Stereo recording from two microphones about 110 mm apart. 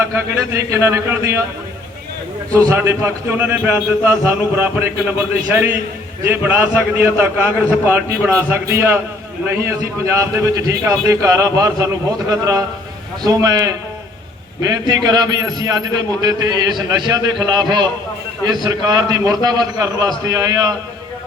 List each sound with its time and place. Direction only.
0.0 s a man's voice: 25° right (ahead or behind)
2.5 s a man's voice: 30° right (ahead or behind)
6.2 s a man's voice: 20° right (ahead or behind)